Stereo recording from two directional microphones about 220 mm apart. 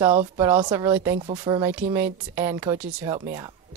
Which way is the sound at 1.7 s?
10° right (ahead or behind).